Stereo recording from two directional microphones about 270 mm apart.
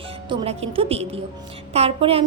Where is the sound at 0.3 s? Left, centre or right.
Right.